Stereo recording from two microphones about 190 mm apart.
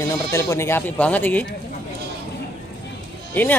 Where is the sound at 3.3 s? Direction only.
10° left (ahead or behind).